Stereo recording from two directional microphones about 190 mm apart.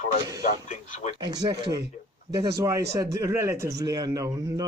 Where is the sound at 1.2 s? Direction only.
20° right (ahead or behind).